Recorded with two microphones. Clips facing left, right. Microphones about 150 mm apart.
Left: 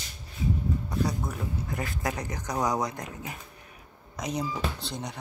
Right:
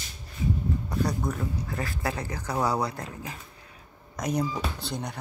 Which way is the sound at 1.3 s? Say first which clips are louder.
Right 1 dB; 20° left (ahead or behind).